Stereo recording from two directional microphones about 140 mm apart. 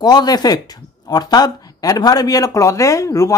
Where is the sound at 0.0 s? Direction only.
30° left (ahead or behind).